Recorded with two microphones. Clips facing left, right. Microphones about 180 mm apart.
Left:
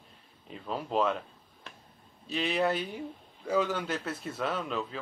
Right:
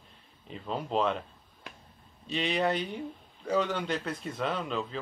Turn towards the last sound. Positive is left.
turn(degrees=5)  # may be behind; listen again after turning